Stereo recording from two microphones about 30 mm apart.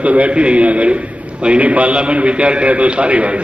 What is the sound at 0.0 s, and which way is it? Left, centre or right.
Speech, right.